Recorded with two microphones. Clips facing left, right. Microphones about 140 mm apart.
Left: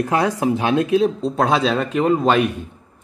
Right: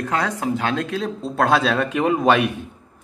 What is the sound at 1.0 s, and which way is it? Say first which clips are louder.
Speech: left 5 dB; centre (ahead or behind).